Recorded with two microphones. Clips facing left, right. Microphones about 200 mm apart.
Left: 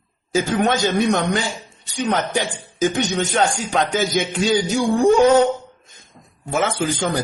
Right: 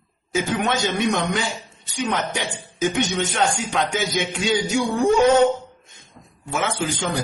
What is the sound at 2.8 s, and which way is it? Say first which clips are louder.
A man's voice: left 2 dB; 35° left (ahead or behind).